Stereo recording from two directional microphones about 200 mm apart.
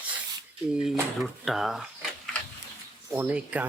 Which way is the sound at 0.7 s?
5° right (ahead or behind).